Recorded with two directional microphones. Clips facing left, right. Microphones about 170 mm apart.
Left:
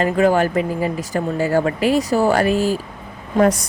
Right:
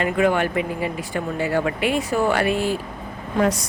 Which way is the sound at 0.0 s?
35° left (ahead or behind).